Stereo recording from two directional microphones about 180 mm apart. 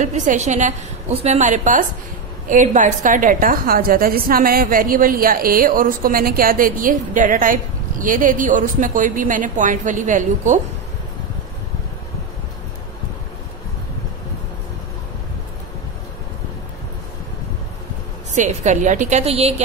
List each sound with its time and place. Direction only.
0.0 s a woman's voice: 45° right (ahead or behind)
18.3 s a woman's voice: 40° right (ahead or behind)